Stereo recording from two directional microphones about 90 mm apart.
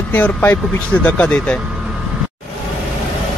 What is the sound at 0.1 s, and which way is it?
Speech, 15° left (ahead or behind).